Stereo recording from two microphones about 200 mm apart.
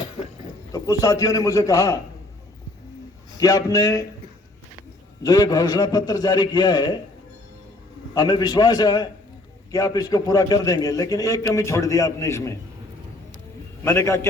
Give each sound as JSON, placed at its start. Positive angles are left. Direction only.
{"t": 0.7, "sound": "a man's voice", "side_deg": 15}
{"t": 3.4, "sound": "a man's voice", "side_deg": 15}
{"t": 5.2, "sound": "a man's voice", "side_deg": 20}
{"t": 8.1, "sound": "a man's voice", "side_deg": 20}
{"t": 13.8, "sound": "a man's voice", "side_deg": 15}